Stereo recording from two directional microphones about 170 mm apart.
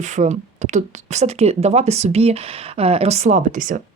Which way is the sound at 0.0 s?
45° right (ahead or behind).